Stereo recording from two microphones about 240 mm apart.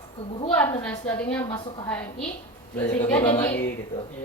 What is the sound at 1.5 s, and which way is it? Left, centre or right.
Speech, centre.